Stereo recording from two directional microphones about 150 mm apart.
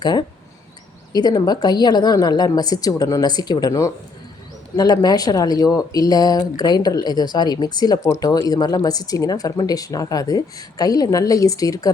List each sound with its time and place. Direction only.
0.0 s speech: 30° left (ahead or behind)